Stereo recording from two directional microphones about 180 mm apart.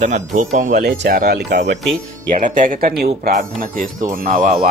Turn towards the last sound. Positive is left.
turn(degrees=-45)  # may be behind; listen again after turning